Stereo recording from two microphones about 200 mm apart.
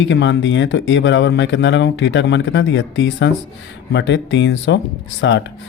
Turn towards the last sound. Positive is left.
turn(degrees=65)  # may be behind; listen again after turning